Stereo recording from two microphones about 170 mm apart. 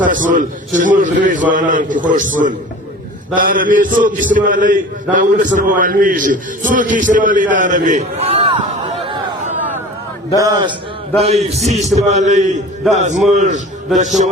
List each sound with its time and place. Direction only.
0.0 s a man's voice: 50° right (ahead or behind); by 8.9 s 35° right (ahead or behind)
10.3 s a man's voice: 20° right (ahead or behind)
11.6 s a man's voice: centre (ahead or behind)
11.9 s a man's voice: 40° right (ahead or behind)